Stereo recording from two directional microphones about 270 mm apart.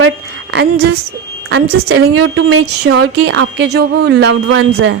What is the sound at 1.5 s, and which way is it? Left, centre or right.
Speech, right.